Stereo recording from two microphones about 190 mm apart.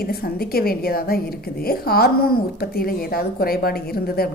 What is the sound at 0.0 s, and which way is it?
Speech, 55° left (ahead or behind).